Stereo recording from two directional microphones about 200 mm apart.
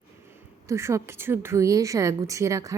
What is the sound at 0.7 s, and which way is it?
A woman's voice, 15° right (ahead or behind).